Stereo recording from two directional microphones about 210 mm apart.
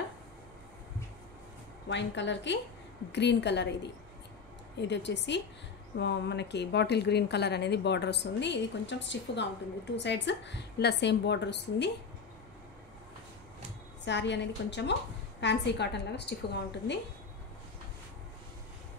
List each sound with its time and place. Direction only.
1.9 s a woman's voice: 55° left (ahead or behind)
14.0 s a woman's voice: 55° left (ahead or behind)